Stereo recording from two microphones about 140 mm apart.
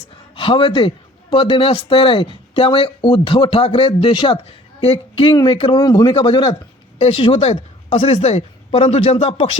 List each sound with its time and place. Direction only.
0.3 s a man's voice: 40° left (ahead or behind)